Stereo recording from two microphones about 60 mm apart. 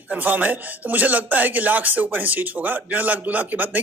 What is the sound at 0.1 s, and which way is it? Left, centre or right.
Speech, right.